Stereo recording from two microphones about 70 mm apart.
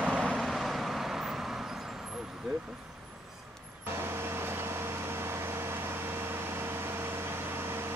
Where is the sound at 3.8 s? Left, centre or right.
Right.